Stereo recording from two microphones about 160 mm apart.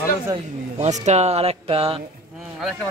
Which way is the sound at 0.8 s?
45° right (ahead or behind).